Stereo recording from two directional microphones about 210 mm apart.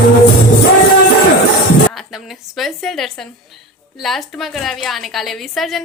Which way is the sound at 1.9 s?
Centre (ahead or behind).